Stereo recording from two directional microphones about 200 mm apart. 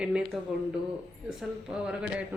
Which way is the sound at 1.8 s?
5° right (ahead or behind).